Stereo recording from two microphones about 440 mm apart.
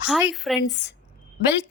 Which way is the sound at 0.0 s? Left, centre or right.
Centre.